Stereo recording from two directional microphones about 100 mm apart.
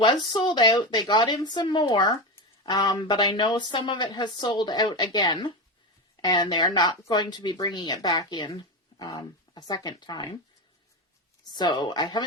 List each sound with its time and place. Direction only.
0.0 s speech: 45° left (ahead or behind)
11.5 s speech: 45° left (ahead or behind)